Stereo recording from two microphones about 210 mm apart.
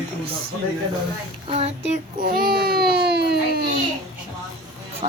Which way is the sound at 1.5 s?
30° right (ahead or behind).